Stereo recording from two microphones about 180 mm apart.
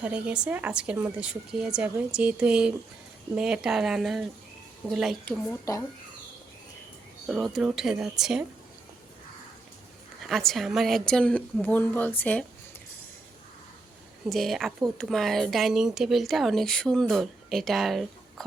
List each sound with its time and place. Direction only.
0.0 s speech: 5° right (ahead or behind)
5.7 s speech: 20° left (ahead or behind)
7.3 s speech: centre (ahead or behind)
10.2 s speech: centre (ahead or behind)
14.3 s speech: centre (ahead or behind)